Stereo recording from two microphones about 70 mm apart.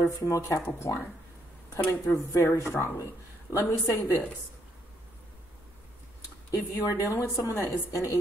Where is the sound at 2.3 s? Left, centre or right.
Left.